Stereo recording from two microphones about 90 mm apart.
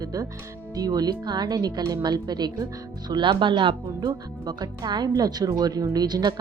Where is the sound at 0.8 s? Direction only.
45° right (ahead or behind).